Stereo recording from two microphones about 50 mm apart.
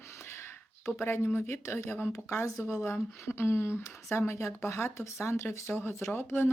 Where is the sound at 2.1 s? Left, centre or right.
Left.